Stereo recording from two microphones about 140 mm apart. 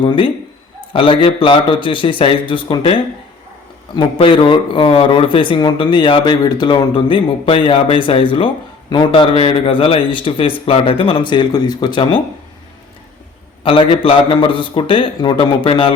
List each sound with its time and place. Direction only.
0.9 s speech: 40° left (ahead or behind)
3.9 s speech: 35° left (ahead or behind)
13.7 s speech: 40° left (ahead or behind)